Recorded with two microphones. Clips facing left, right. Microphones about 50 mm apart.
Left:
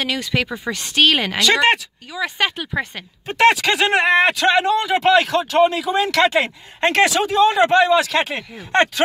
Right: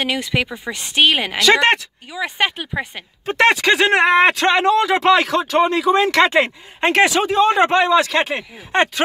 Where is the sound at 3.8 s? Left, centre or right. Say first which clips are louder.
Right 1 dB; right.